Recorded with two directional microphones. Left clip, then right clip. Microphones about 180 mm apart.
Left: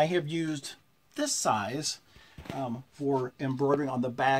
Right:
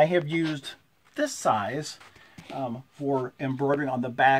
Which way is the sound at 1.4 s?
15° right (ahead or behind).